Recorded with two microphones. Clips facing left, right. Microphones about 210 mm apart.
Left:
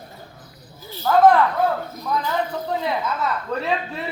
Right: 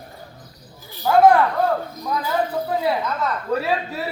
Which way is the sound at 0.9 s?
10° right (ahead or behind).